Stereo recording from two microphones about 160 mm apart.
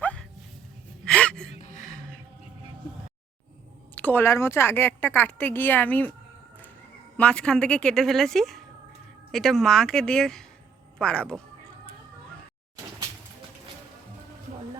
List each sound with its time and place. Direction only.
0.0 s music: 5° left (ahead or behind)
1.0 s gasp: 5° left (ahead or behind)
1.5 s music: 55° left (ahead or behind)
3.9 s speech: 10° left (ahead or behind)
7.2 s a woman's voice: 5° left (ahead or behind)